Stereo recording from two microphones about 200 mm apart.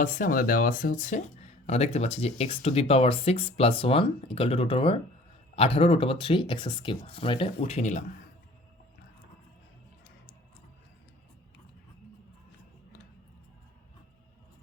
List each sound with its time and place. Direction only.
0.0 s speech: 45° left (ahead or behind)